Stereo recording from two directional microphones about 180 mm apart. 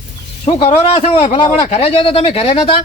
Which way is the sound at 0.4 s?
35° left (ahead or behind).